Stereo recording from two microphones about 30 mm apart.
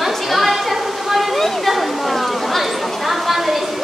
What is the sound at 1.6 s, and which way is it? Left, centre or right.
Chatter, centre.